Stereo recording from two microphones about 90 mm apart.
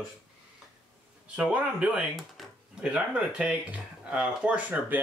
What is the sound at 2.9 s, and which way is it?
Speech, 15° right (ahead or behind).